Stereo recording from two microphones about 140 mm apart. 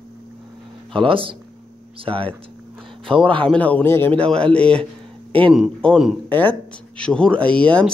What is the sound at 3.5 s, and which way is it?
Speech, 10° left (ahead or behind).